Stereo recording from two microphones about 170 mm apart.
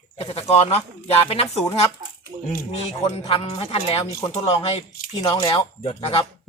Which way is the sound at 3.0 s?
30° left (ahead or behind).